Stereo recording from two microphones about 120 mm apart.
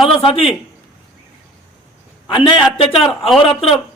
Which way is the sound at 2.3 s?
40° left (ahead or behind).